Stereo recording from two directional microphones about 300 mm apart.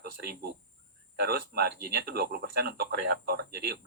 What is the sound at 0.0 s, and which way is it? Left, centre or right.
Speech, right.